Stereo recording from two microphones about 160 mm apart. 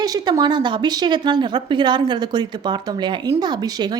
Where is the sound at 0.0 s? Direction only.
25° right (ahead or behind).